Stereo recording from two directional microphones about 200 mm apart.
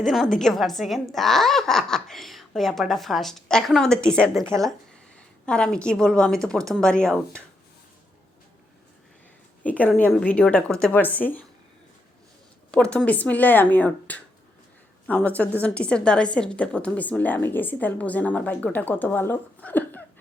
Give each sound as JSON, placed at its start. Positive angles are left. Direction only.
{"t": 0.0, "sound": "a woman's voice", "side_deg": 0}
{"t": 9.6, "sound": "a woman's voice", "side_deg": 5}
{"t": 12.7, "sound": "a woman's voice", "side_deg": 5}